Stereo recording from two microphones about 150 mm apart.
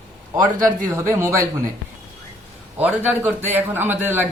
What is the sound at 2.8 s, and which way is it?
A man's voice, 10° right (ahead or behind).